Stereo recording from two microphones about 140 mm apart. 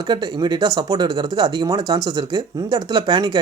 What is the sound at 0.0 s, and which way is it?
Speech, 30° right (ahead or behind).